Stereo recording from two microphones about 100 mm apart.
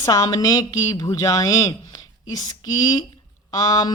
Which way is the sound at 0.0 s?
35° left (ahead or behind).